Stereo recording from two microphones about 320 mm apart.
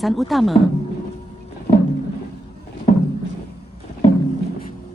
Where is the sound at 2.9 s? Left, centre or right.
Left.